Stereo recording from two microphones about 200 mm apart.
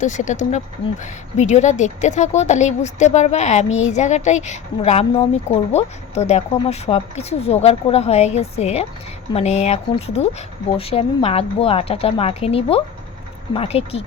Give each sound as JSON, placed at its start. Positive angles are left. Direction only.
{"t": 0.0, "sound": "a woman's voice", "side_deg": 40}